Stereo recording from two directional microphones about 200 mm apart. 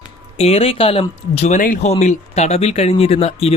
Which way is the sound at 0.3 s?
30° left (ahead or behind).